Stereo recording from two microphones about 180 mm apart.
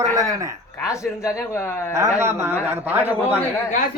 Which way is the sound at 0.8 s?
15° left (ahead or behind).